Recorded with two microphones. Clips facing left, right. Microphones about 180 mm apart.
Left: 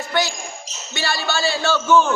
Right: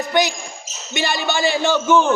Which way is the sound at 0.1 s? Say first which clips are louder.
Right 2 dB; 15° right (ahead or behind).